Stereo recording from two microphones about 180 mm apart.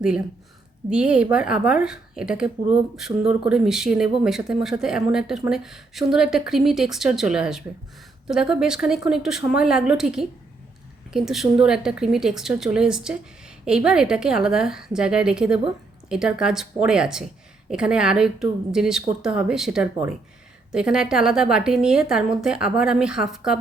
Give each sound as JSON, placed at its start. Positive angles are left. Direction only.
{"t": 0.9, "sound": "speech", "side_deg": -5}
{"t": 3.1, "sound": "speech", "side_deg": -30}
{"t": 3.5, "sound": "speech", "side_deg": -5}